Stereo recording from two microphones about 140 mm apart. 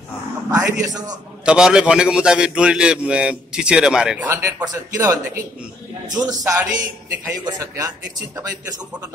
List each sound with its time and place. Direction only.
0.5 s a man's voice: 25° right (ahead or behind)
1.4 s a man's voice: 5° right (ahead or behind)
4.3 s a man's voice: 20° right (ahead or behind)